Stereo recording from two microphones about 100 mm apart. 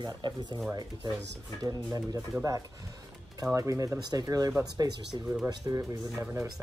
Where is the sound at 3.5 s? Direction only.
30° right (ahead or behind).